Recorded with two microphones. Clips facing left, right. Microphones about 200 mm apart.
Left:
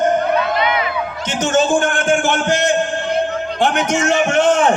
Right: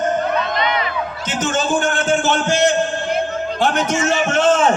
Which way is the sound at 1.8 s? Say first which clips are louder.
Left 2 dB; 50° left (ahead or behind).